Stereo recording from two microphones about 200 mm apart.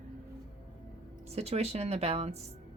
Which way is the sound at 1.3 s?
30° right (ahead or behind).